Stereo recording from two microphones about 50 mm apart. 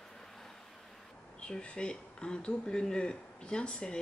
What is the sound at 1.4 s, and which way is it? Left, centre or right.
Speech, left.